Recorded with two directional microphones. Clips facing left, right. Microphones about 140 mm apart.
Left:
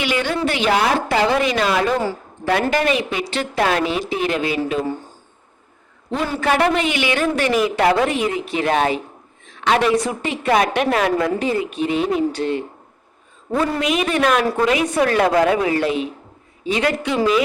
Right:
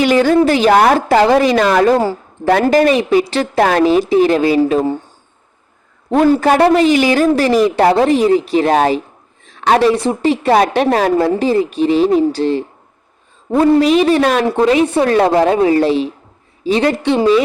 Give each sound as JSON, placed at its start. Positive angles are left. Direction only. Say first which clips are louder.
{"t": 0.0, "sound": "a woman's voice", "louder": "right 10 dB", "side_deg": -40}
{"t": 6.1, "sound": "a woman's voice", "louder": "right 9 dB", "side_deg": -45}